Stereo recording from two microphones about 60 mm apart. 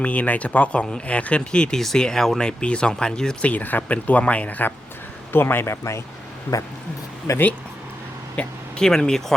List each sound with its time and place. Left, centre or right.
0.0 s speech: left
3.4 s speech: left
7.3 s speech: left
8.4 s speech: centre